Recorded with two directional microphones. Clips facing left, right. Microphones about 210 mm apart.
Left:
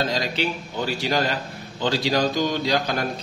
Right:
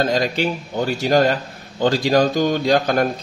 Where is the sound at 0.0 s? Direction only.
50° right (ahead or behind).